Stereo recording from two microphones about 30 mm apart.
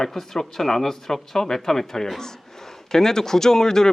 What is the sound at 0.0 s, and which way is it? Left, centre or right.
Speech, centre.